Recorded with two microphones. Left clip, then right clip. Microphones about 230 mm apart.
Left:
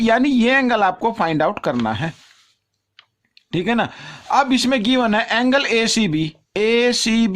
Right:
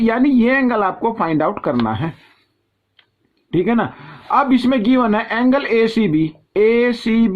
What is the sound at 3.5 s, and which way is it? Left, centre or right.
Speech, left.